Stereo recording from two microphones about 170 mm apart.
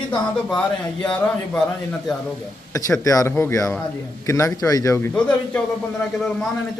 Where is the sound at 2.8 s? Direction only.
20° left (ahead or behind).